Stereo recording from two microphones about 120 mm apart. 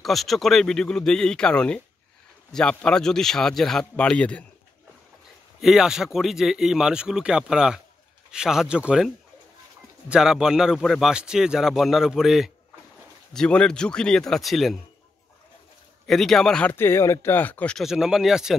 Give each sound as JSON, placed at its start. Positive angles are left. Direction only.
{"t": 0.0, "sound": "a man's voice", "side_deg": 0}
{"t": 5.6, "sound": "a man's voice", "side_deg": -5}
{"t": 16.1, "sound": "a man's voice", "side_deg": 0}
{"t": 16.7, "sound": "speech", "side_deg": 20}
{"t": 17.8, "sound": "a man's voice", "side_deg": -5}